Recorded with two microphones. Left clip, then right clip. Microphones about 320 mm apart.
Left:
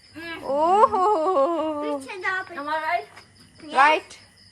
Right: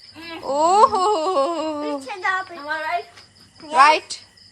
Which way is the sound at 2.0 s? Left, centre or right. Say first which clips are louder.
Right 4 dB; right.